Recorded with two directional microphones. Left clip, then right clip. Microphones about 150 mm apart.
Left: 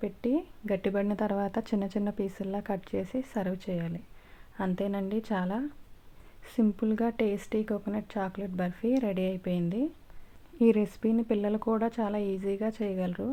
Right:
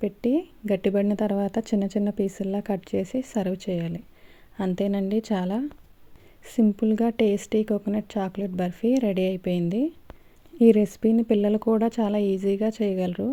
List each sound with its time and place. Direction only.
0.0 s a woman's voice: 35° right (ahead or behind)